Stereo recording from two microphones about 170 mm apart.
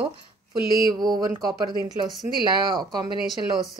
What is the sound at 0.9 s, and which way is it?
Speech, 25° right (ahead or behind).